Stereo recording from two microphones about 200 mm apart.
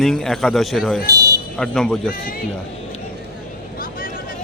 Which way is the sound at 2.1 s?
45° left (ahead or behind).